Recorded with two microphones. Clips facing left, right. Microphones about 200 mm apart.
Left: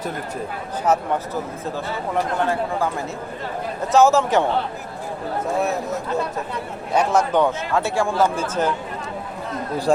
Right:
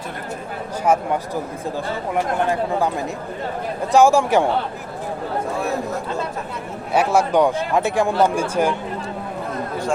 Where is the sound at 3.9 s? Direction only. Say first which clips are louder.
Right 1 dB; 15° right (ahead or behind).